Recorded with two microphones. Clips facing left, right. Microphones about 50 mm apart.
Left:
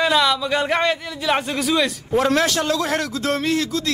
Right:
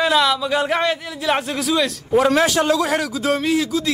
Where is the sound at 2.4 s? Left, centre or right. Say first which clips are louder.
Right 3 dB; centre.